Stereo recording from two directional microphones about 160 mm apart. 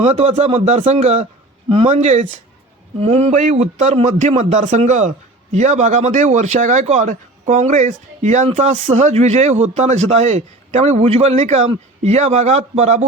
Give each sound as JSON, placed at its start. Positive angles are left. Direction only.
{"t": 0.0, "sound": "a man's voice", "side_deg": -40}